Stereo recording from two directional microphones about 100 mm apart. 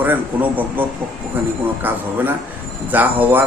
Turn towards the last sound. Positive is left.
turn(degrees=-15)  # may be behind; listen again after turning